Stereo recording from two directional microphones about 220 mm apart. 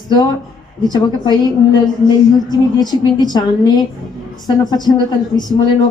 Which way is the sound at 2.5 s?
20° left (ahead or behind).